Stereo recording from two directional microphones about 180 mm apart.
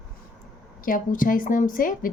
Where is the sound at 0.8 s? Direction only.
50° left (ahead or behind).